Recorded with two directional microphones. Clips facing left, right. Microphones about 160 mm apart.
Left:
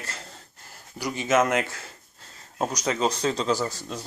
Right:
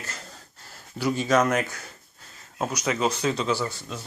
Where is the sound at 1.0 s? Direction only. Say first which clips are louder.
Right 1 dB; 15° left (ahead or behind); by 4.1 s 40° left (ahead or behind).